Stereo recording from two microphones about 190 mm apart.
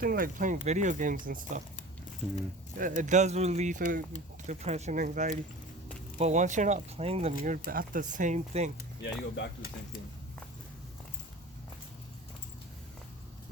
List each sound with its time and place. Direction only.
0.0 s speech: 50° right (ahead or behind)
2.7 s speech: 45° right (ahead or behind)
4.4 s speech: 35° right (ahead or behind)
7.6 s speech: 50° right (ahead or behind)
9.0 s speech: 65° left (ahead or behind)